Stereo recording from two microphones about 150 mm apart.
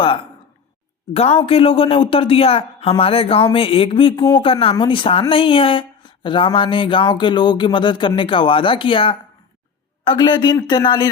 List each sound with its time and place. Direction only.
0.0 s speech: 35° left (ahead or behind)